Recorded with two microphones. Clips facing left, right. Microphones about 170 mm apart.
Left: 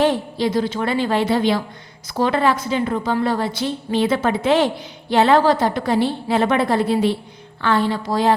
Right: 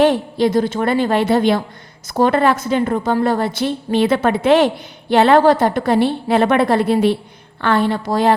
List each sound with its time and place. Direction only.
0.0 s a woman's voice: 55° right (ahead or behind)